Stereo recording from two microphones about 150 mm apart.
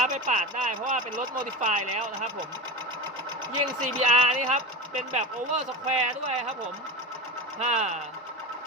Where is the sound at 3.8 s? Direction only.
50° right (ahead or behind).